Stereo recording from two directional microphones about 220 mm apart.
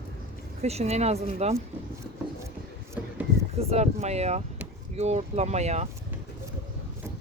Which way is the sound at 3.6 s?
30° right (ahead or behind).